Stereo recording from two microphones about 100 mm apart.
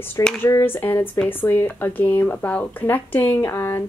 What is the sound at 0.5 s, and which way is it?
A woman's voice, 25° left (ahead or behind).